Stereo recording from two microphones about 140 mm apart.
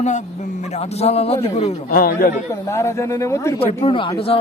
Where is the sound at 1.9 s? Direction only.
90° left.